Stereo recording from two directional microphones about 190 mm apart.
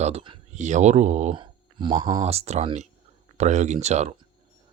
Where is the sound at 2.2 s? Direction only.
35° right (ahead or behind).